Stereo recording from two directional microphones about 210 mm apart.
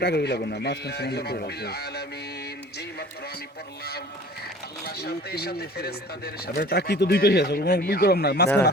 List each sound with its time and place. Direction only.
0.0 s speech: 50° left (ahead or behind)
4.9 s speech: 50° left (ahead or behind)